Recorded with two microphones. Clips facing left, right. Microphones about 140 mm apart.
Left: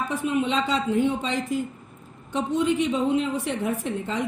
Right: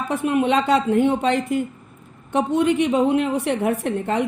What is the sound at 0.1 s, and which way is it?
A woman's voice, 60° right (ahead or behind).